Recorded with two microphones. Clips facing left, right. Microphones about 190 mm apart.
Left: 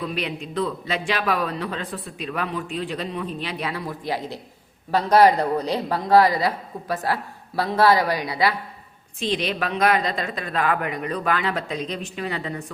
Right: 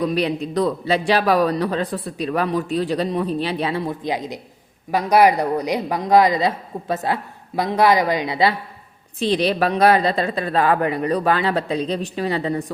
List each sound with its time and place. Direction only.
0.0 s a man's voice: 35° right (ahead or behind)
9.1 s a man's voice: 35° right (ahead or behind)